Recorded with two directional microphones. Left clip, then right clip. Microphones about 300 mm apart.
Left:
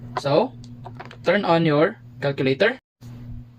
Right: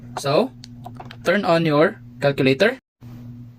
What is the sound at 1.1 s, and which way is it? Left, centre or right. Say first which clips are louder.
Speech: right 1 dB; right.